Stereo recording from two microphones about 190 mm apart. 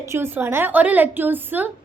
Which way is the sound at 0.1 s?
10° right (ahead or behind).